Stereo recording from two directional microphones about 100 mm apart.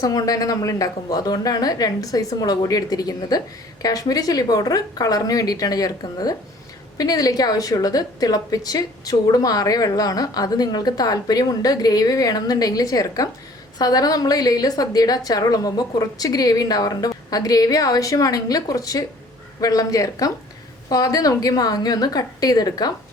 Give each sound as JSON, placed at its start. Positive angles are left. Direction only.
{"t": 0.0, "sound": "a woman's voice", "side_deg": 35}